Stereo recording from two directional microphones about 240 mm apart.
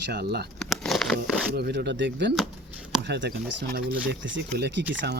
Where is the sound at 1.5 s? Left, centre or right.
Right.